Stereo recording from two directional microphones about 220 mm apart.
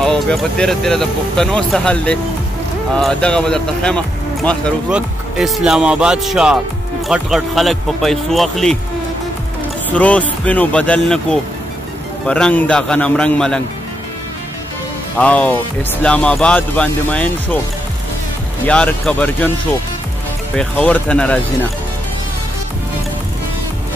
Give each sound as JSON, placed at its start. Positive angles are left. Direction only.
{"t": 0.0, "sound": "speech", "side_deg": 0}
{"t": 9.8, "sound": "speech", "side_deg": 5}
{"t": 12.3, "sound": "speech", "side_deg": 5}
{"t": 15.1, "sound": "speech", "side_deg": 5}
{"t": 18.7, "sound": "speech", "side_deg": 5}
{"t": 20.5, "sound": "speech", "side_deg": 5}